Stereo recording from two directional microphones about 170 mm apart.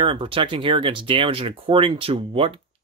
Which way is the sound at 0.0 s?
30° right (ahead or behind).